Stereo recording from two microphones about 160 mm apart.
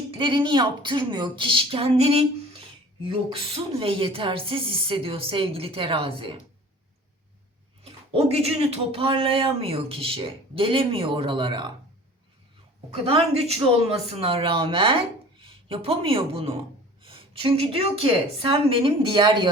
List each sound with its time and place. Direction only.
0.1 s speech: 30° right (ahead or behind)
7.9 s speech: 40° right (ahead or behind)
12.9 s speech: 35° right (ahead or behind)